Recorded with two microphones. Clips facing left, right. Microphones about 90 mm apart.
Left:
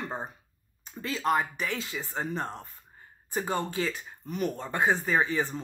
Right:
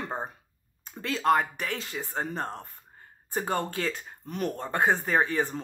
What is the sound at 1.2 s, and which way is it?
Speech, 55° right (ahead or behind).